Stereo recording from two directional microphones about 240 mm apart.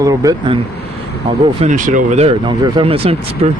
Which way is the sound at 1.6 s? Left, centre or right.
Right.